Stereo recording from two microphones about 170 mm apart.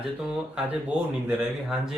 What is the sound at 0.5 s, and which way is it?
A woman's voice, 10° right (ahead or behind).